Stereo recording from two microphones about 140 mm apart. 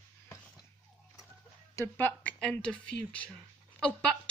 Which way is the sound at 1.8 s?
15° left (ahead or behind).